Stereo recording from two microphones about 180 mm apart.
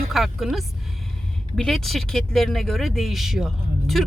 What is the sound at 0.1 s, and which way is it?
Speech, centre (ahead or behind).